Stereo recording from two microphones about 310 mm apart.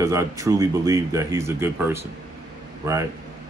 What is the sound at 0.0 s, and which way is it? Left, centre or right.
Speech, centre.